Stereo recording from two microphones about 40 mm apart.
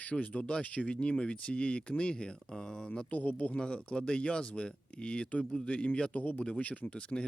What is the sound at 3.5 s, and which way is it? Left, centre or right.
Speech, left.